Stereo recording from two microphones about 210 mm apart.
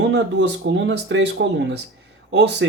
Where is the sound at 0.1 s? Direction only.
55° right (ahead or behind).